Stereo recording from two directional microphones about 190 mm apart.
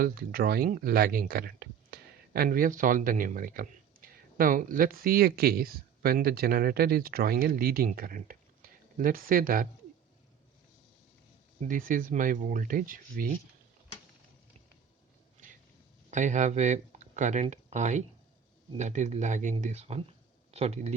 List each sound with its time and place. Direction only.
0.0 s speech: 50° right (ahead or behind)
11.6 s speech: 45° right (ahead or behind)
16.0 s speech: 40° right (ahead or behind)